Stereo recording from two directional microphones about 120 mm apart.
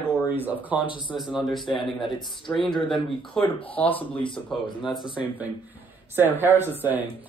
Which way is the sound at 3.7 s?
15° left (ahead or behind).